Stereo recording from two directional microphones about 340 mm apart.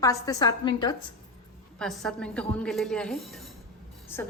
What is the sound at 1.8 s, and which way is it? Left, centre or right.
A woman's voice, centre.